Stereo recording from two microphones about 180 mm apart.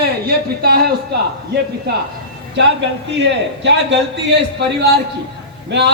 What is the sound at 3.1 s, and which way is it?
A man's voice, 75° right (ahead or behind).